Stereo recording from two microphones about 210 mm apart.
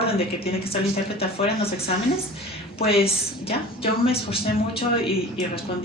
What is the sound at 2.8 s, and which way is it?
A woman's voice, 25° left (ahead or behind).